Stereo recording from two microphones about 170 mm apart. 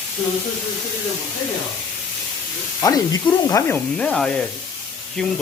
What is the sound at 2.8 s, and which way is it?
Speech, 20° left (ahead or behind).